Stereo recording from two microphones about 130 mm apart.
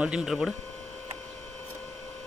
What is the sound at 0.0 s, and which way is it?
Speech, 5° right (ahead or behind).